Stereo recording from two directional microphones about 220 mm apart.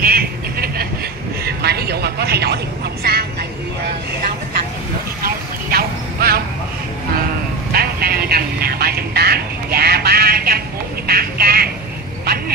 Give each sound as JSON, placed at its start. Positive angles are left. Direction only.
{"t": 0.0, "sound": "vehicle", "side_deg": -45}
{"t": 5.2, "sound": "vehicle", "side_deg": -45}
{"t": 7.7, "sound": "vehicle", "side_deg": -45}
{"t": 11.1, "sound": "bird", "side_deg": -45}